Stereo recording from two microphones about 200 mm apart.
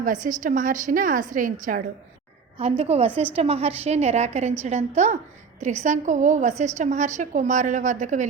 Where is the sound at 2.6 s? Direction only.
30° right (ahead or behind).